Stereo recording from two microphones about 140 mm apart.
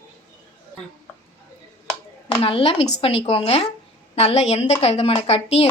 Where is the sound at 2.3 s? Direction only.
40° left (ahead or behind).